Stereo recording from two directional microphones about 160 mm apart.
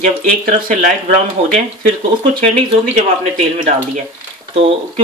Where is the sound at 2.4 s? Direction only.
40° right (ahead or behind).